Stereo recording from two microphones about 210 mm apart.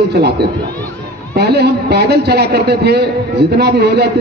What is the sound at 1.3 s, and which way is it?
A man's voice, 50° right (ahead or behind).